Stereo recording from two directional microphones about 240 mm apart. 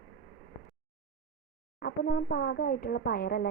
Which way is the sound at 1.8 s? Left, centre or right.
Left.